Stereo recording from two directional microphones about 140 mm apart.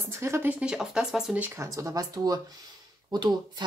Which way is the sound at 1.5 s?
20° right (ahead or behind).